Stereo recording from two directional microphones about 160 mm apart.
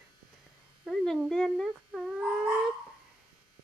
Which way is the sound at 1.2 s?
Centre (ahead or behind).